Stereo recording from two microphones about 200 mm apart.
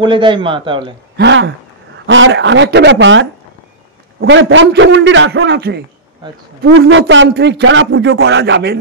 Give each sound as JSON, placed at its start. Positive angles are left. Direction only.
{"t": 0.0, "sound": "a man's voice", "side_deg": -25}
{"t": 1.1, "sound": "a man's voice", "side_deg": -65}
{"t": 6.8, "sound": "speech", "side_deg": -60}